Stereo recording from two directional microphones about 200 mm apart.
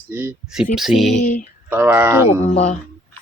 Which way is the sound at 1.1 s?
40° left (ahead or behind).